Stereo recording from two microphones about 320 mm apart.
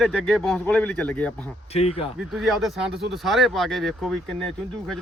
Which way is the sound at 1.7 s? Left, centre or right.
Centre.